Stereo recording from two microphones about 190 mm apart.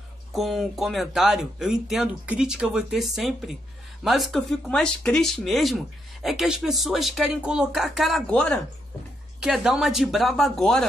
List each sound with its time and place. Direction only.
0.3 s speech: centre (ahead or behind)